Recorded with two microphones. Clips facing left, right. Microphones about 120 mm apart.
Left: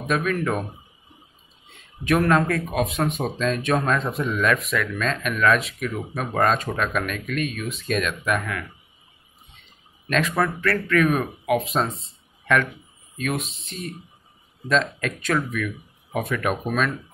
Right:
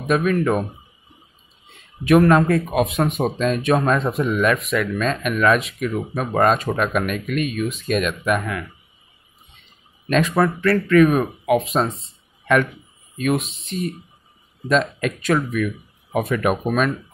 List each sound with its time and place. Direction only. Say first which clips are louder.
0.1 s speech: right 5 dB; 10° right (ahead or behind)
2.0 s speech: right 5 dB; 10° right (ahead or behind)
10.0 s speech: right 4 dB; 5° right (ahead or behind)
10.3 s speech: right 5 dB; 15° right (ahead or behind)
13.2 s speech: right 6 dB; 5° right (ahead or behind)
14.7 s speech: right 3 dB; 10° right (ahead or behind)
15.3 s speech: right 3 dB; 25° right (ahead or behind)